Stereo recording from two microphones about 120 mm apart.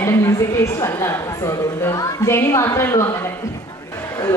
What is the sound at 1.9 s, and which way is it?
A woman's voice, 20° left (ahead or behind).